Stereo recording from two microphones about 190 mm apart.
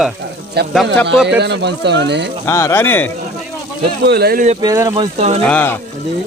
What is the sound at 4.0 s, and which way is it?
Speech, 60° right (ahead or behind).